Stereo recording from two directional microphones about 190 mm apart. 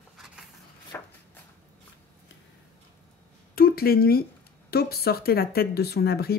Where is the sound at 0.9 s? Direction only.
10° left (ahead or behind).